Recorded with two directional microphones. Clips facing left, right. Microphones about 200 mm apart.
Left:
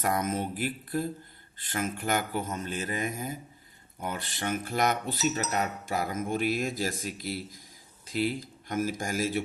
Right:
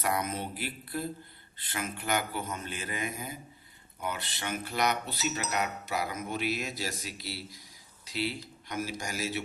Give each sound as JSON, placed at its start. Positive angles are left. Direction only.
{"t": 0.0, "sound": "speech", "side_deg": 45}